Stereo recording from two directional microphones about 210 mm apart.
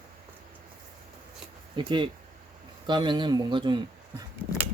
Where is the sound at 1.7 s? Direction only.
20° right (ahead or behind).